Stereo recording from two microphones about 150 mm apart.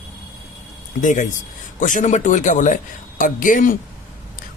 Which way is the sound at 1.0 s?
55° left (ahead or behind).